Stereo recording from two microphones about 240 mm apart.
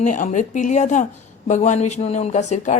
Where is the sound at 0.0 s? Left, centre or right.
Left.